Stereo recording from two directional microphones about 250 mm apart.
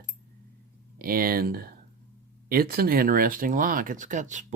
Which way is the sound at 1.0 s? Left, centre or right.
Right.